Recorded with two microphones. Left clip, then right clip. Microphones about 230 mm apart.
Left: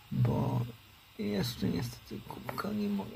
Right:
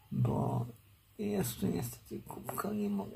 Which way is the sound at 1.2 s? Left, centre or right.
Centre.